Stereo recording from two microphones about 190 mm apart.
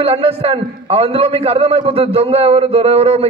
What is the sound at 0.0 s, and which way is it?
A man's voice, 30° right (ahead or behind).